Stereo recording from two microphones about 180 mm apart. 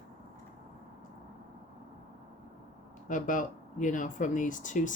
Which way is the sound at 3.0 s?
45° left (ahead or behind).